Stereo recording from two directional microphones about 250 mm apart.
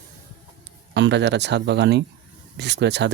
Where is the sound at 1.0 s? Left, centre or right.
Right.